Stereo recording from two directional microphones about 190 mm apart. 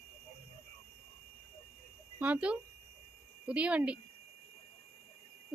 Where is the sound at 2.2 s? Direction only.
5° right (ahead or behind).